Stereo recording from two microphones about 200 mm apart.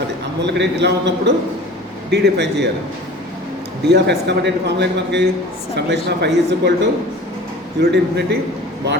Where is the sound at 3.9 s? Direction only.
60° right (ahead or behind).